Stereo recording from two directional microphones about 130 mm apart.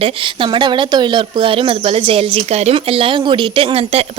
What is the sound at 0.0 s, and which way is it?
Speech, 40° right (ahead or behind).